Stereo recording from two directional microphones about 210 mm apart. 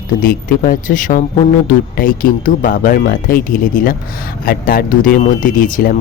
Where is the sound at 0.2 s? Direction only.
40° left (ahead or behind).